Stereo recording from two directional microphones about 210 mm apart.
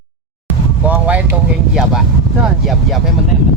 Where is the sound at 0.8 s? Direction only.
5° right (ahead or behind).